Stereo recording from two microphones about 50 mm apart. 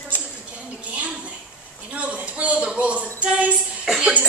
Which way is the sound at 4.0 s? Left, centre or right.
Right.